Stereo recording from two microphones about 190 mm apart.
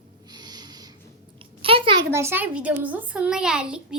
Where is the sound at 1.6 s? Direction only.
30° right (ahead or behind).